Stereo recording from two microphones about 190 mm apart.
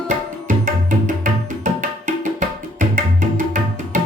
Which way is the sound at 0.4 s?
45° right (ahead or behind).